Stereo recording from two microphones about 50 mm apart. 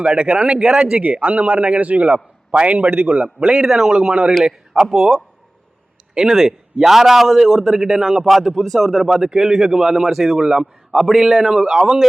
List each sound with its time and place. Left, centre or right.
0.0 s a man's voice: centre
0.9 s a man's voice: right
3.4 s a man's voice: centre